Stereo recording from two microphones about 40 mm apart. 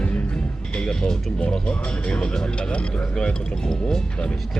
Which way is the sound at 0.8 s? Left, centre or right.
Centre.